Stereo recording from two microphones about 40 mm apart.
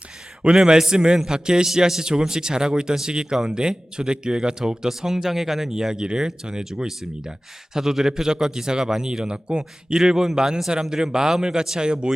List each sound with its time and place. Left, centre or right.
0.5 s speech: centre
10.0 s speech: centre